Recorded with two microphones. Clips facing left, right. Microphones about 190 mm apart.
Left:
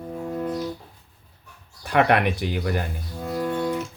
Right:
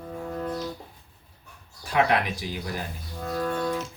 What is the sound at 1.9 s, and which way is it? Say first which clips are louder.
Speech: left 4 dB; 60° left (ahead or behind).